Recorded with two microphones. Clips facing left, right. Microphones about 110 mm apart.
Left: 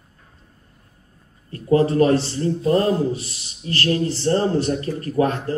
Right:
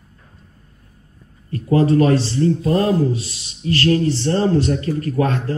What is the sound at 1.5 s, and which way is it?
A man's voice, 25° left (ahead or behind).